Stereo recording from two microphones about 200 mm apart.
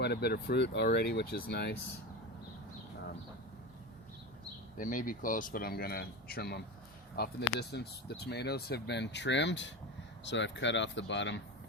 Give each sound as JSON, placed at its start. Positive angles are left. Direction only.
{"t": 0.0, "sound": "speech", "side_deg": 55}
{"t": 4.8, "sound": "speech", "side_deg": 40}